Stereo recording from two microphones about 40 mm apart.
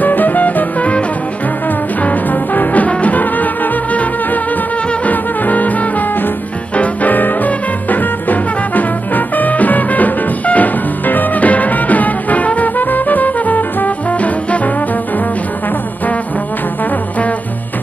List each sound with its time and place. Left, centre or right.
0.0 s music: left
2.0 s music: left
5.0 s music: left